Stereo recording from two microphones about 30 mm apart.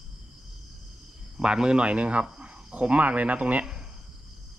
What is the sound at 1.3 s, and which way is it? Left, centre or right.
Speech, right.